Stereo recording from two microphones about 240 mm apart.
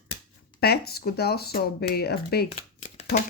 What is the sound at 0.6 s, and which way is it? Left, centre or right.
Speech, left.